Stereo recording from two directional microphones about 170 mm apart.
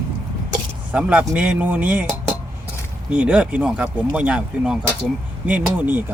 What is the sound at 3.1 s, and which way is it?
Speech, 5° right (ahead or behind).